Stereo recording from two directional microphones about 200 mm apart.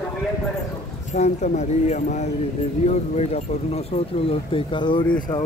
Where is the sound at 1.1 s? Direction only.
35° left (ahead or behind).